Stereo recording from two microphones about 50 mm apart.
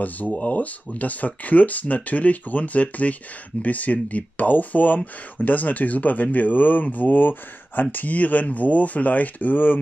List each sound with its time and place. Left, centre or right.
0.0 s speech: left